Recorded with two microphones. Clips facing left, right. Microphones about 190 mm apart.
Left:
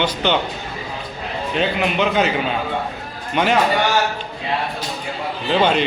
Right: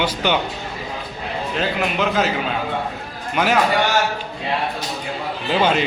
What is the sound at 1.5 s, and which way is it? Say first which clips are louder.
Speech: left 3 dB; centre (ahead or behind).